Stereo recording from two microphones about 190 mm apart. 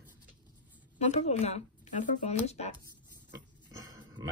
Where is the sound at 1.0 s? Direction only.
35° left (ahead or behind).